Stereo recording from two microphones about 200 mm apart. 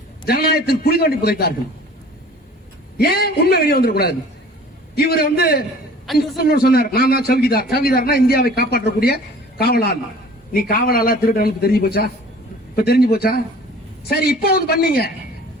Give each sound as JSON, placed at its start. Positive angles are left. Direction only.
{"t": 0.3, "sound": "a man's voice", "side_deg": 50}
{"t": 3.0, "sound": "a man's voice", "side_deg": 50}